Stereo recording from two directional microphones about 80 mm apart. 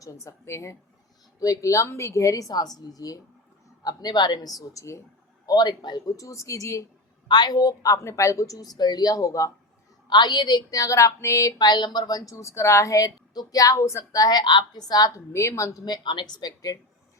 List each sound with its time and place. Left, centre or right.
0.0 s a woman's voice: left
3.8 s speech: left
4.7 s a woman's voice: left
5.5 s speech: left
6.1 s a woman's voice: left
7.3 s a woman's voice: left
10.1 s a woman's voice: left
11.5 s speech: left
12.3 s a woman's voice: left
14.4 s speech: left
15.3 s a woman's voice: left
15.8 s speech: left